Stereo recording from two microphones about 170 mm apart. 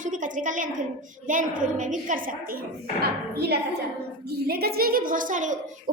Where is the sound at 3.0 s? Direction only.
70° right (ahead or behind); by 5.5 s 50° right (ahead or behind).